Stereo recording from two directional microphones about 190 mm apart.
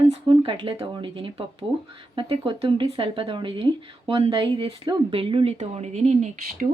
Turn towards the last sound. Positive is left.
turn(degrees=-40)  # may be behind; listen again after turning